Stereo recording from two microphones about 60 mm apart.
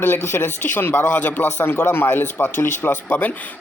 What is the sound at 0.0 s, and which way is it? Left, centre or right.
Speech, left.